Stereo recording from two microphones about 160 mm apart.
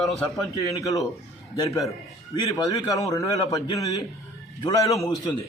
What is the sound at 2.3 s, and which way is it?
A man's voice, 20° left (ahead or behind).